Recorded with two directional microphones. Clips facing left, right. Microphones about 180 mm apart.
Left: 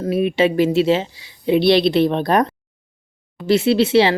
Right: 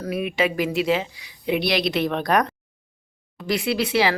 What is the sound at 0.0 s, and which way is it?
Speech, 30° left (ahead or behind).